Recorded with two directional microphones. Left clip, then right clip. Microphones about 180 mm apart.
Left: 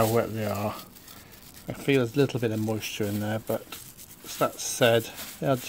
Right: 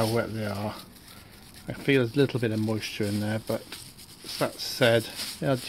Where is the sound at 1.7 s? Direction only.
Centre (ahead or behind).